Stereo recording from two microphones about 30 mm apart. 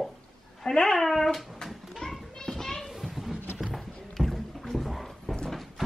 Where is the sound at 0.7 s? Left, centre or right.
Left.